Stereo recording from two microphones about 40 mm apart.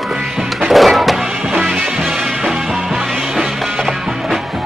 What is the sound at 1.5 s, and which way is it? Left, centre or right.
Music, right.